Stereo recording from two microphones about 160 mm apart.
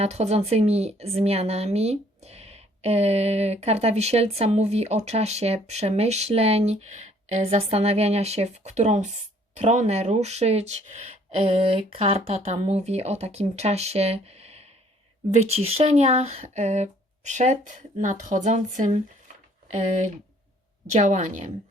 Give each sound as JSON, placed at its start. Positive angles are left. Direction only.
{"t": 0.0, "sound": "speech", "side_deg": -40}
{"t": 20.9, "sound": "speech", "side_deg": -50}